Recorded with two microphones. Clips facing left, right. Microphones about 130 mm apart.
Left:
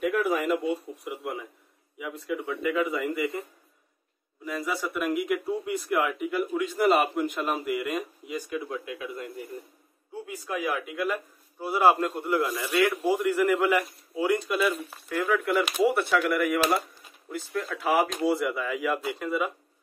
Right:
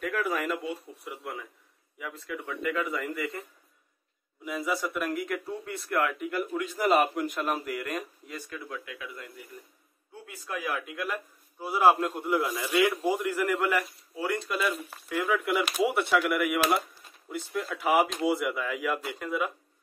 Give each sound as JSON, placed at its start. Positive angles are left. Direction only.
{"t": 0.0, "sound": "bird", "side_deg": 10}
{"t": 1.0, "sound": "speech", "side_deg": 15}
{"t": 2.0, "sound": "a sound", "side_deg": 15}
{"t": 4.5, "sound": "speech", "side_deg": -5}
{"t": 8.4, "sound": "speech", "side_deg": 20}
{"t": 10.2, "sound": "a man's voice", "side_deg": 10}
{"t": 13.2, "sound": "speech", "side_deg": 0}
{"t": 15.0, "sound": "a man's voice", "side_deg": -10}
{"t": 17.9, "sound": "speech", "side_deg": 0}